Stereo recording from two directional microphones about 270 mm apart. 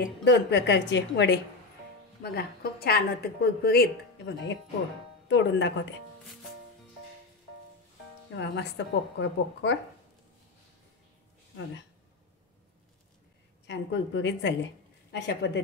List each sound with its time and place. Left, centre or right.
0.0 s a woman's voice: left
8.4 s a woman's voice: left
13.7 s a woman's voice: left